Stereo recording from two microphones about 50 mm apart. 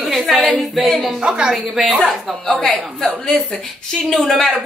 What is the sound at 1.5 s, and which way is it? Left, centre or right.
Speech, centre.